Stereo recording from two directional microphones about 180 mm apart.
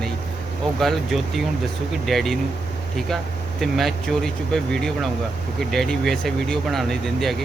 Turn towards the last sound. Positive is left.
turn(degrees=0)  # may be behind; listen again after turning